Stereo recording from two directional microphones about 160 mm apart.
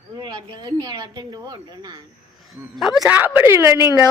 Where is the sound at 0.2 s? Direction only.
30° right (ahead or behind).